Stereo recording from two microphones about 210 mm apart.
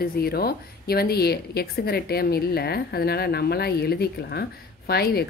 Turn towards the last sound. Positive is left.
turn(degrees=50)  # may be behind; listen again after turning